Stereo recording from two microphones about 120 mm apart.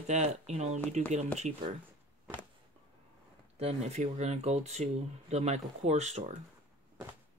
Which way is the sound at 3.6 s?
60° right (ahead or behind).